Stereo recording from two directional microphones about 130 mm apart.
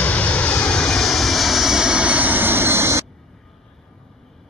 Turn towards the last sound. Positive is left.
turn(degrees=-20)  # may be behind; listen again after turning